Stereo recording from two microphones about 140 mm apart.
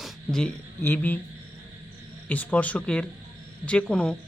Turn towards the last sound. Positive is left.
turn(degrees=5)  # may be behind; listen again after turning